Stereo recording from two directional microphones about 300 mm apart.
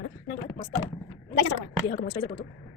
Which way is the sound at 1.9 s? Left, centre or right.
Left.